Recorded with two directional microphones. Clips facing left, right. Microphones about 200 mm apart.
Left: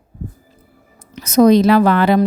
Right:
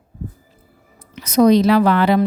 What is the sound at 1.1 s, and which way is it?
A woman's voice, 45° left (ahead or behind).